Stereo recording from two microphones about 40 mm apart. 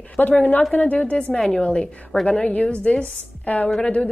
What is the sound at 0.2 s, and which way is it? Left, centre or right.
Speech, left.